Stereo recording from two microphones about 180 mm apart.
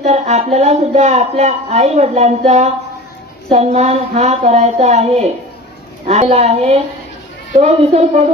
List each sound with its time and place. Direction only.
0.0 s speech: 40° right (ahead or behind)